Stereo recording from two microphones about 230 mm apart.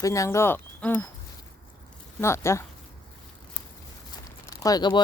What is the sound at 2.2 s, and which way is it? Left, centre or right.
Speech, centre.